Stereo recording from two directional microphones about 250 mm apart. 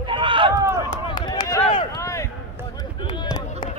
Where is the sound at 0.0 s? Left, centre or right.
Centre.